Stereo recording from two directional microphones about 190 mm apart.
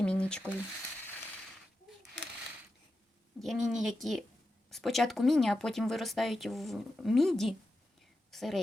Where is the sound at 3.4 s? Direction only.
Centre (ahead or behind).